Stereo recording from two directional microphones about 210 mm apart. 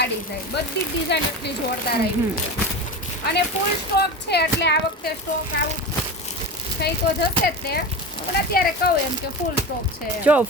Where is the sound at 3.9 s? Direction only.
50° left (ahead or behind).